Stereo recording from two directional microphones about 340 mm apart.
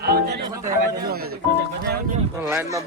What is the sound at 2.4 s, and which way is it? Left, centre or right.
Speech, centre.